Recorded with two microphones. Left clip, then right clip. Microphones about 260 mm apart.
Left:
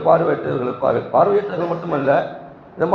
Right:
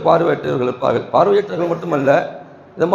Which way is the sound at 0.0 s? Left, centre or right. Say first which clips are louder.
Right 1 dB; right.